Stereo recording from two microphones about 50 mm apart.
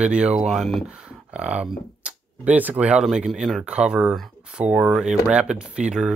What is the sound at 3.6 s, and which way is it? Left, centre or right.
Speech, centre.